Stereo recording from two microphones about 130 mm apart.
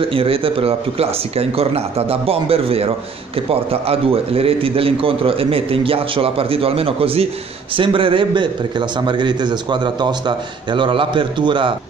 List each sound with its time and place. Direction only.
0.1 s a man's voice: 45° right (ahead or behind)